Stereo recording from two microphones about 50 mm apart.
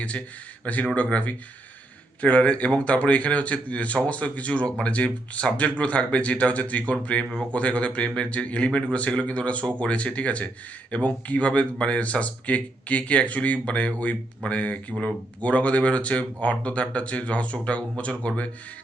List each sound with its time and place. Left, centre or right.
0.6 s speech: left